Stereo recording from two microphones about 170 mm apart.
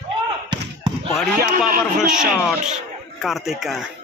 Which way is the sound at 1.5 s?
55° right (ahead or behind).